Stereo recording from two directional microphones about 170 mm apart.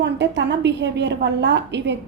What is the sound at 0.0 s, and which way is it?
A woman's voice, 90° right.